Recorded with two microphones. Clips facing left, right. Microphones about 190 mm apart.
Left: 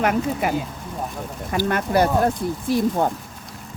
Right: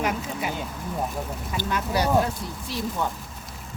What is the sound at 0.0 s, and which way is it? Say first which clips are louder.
Speech: left 7 dB; 60° left (ahead or behind).